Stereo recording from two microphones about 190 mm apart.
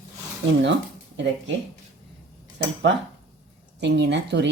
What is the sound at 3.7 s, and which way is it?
Speech, 65° right (ahead or behind).